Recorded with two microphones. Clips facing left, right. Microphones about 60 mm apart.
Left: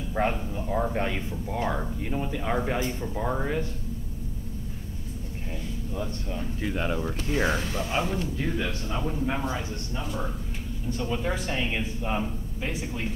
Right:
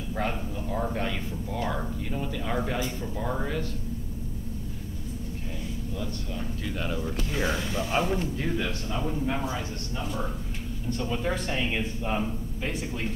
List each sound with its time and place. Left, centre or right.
0.1 s speech: left
5.9 s speech: left
8.0 s a man's voice: centre
10.9 s a man's voice: centre